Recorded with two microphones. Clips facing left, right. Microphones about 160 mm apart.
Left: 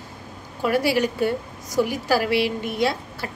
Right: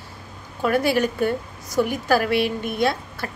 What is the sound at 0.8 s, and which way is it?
A woman's voice, 10° left (ahead or behind).